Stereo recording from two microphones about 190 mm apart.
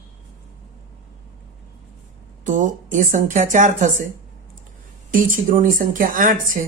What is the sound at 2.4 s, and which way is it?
A woman's voice, 40° right (ahead or behind).